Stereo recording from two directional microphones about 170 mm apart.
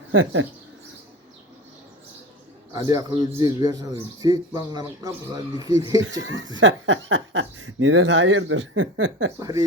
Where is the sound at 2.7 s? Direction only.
20° right (ahead or behind).